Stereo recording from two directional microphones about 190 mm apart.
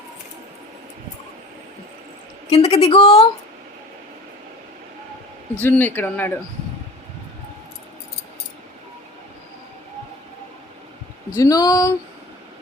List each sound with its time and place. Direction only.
2.5 s a woman's voice: 35° left (ahead or behind)
5.5 s speech: 10° left (ahead or behind)
11.3 s speech: 20° left (ahead or behind)